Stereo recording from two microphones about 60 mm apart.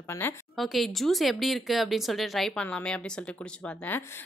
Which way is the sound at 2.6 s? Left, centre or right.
Centre.